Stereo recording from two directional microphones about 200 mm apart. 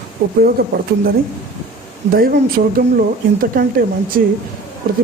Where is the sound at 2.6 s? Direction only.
45° right (ahead or behind).